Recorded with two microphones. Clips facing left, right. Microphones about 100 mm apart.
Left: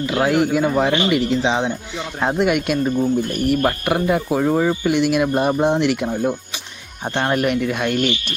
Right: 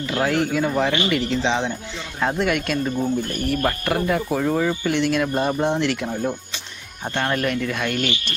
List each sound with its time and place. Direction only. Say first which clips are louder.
0.0 s speech: left 4 dB; 15° left (ahead or behind)